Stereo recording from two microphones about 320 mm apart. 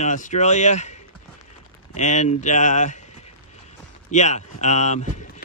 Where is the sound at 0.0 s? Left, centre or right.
Left.